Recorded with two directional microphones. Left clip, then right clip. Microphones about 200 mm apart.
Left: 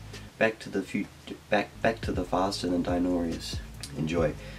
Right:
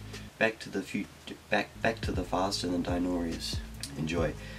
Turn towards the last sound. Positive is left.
turn(degrees=0)  # may be behind; listen again after turning